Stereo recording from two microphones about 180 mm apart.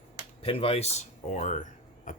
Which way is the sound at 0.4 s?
35° left (ahead or behind).